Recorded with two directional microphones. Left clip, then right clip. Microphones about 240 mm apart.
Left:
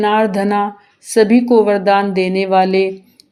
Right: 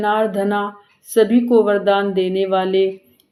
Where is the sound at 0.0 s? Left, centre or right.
Left.